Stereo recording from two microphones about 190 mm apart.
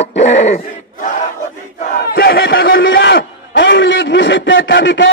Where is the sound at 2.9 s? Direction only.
55° left (ahead or behind).